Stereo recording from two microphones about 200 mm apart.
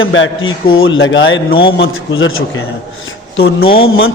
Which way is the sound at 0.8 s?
75° left (ahead or behind).